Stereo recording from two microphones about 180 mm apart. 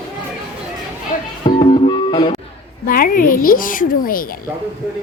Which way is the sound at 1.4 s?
30° left (ahead or behind).